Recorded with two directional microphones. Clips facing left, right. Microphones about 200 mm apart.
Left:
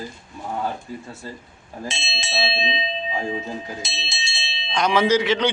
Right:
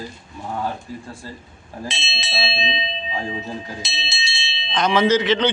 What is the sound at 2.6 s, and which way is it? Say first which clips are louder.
Speech: even; 30° right (ahead or behind).